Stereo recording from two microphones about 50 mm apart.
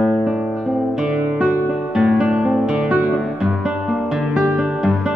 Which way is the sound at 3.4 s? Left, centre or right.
Centre.